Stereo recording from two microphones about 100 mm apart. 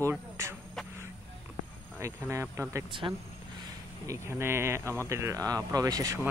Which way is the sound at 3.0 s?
45° right (ahead or behind).